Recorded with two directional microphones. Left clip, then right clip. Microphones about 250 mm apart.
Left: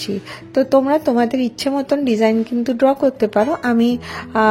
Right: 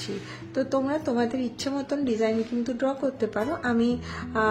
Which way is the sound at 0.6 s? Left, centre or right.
Left.